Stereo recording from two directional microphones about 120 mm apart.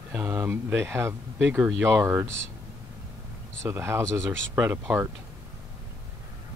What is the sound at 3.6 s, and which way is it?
Speech, 20° right (ahead or behind).